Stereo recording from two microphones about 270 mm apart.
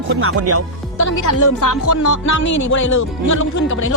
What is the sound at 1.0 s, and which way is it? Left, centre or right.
Music, left.